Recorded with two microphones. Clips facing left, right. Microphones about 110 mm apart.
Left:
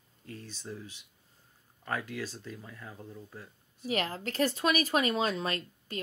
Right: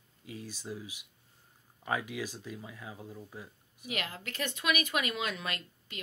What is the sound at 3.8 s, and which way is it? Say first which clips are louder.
Speech: left 6 dB; 35° left (ahead or behind).